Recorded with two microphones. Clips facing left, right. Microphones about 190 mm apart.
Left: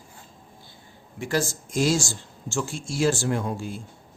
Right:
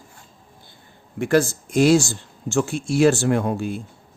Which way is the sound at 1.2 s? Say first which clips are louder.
Right 8 dB; 60° right (ahead or behind).